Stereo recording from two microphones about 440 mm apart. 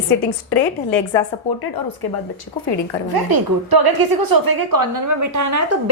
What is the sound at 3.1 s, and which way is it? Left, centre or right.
A woman's voice, right.